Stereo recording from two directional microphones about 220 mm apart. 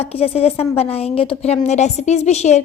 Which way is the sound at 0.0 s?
25° left (ahead or behind).